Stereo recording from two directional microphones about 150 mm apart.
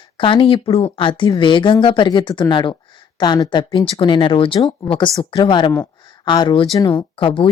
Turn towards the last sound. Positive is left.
turn(degrees=35)  # may be behind; listen again after turning